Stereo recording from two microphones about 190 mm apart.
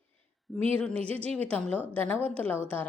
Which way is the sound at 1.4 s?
5° left (ahead or behind).